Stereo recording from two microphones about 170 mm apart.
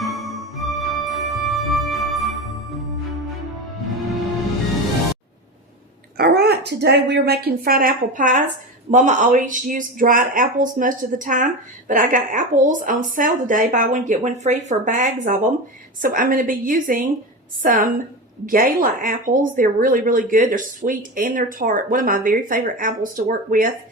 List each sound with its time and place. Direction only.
0.0 s music: centre (ahead or behind)
6.1 s a woman's voice: 70° right (ahead or behind); by 23.6 s 55° right (ahead or behind)